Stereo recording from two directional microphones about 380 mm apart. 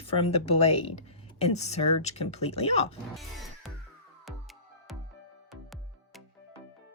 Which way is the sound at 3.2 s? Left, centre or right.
Centre.